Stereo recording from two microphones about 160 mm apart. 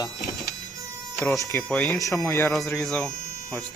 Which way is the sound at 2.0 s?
20° left (ahead or behind).